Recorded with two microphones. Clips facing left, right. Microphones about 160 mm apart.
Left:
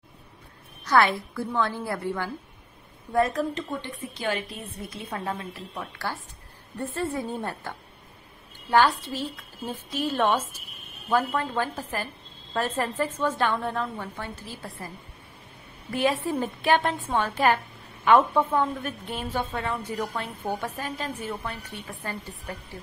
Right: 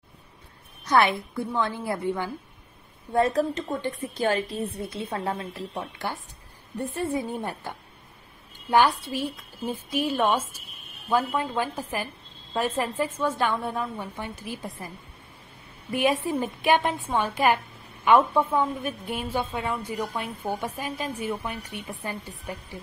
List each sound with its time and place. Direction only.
0.8 s a woman's voice: 20° right (ahead or behind)
3.8 s a woman's voice: 45° right (ahead or behind)
4.7 s a woman's voice: 30° right (ahead or behind)
6.8 s a woman's voice: 15° right (ahead or behind)
15.9 s a woman's voice: 15° right (ahead or behind)